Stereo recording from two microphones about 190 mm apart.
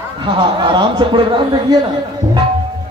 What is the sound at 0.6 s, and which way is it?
A man's voice, 25° right (ahead or behind).